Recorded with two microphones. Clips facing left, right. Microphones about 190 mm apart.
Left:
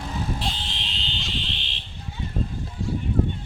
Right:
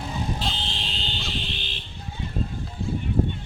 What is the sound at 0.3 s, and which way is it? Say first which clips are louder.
Fire alarm: right 1 dB; 30° right (ahead or behind).